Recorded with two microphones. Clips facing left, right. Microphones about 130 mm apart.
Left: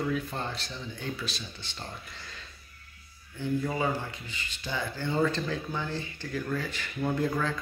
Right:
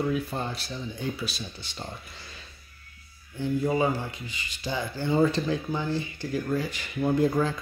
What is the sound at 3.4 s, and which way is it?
Speech, 20° right (ahead or behind).